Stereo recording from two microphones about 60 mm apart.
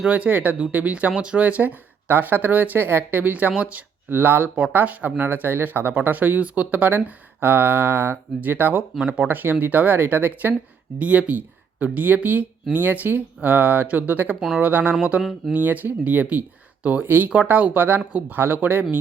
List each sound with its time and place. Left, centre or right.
0.0 s speech: right
4.1 s speech: right
9.0 s speech: centre
9.2 s speech: right
15.2 s speech: centre
15.5 s speech: right